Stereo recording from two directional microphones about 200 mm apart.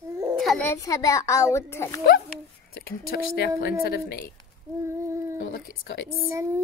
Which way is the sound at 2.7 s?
50° left (ahead or behind).